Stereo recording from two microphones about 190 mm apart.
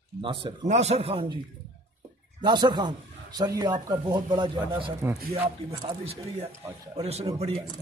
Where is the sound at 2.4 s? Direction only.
25° right (ahead or behind).